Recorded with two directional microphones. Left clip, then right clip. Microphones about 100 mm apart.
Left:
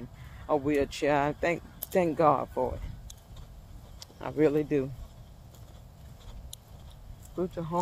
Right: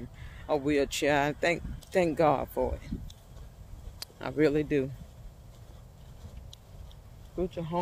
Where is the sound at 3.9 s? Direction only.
25° right (ahead or behind).